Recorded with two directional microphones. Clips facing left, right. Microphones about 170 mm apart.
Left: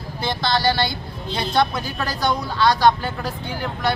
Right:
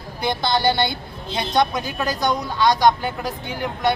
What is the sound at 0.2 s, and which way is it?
Speech, 20° right (ahead or behind).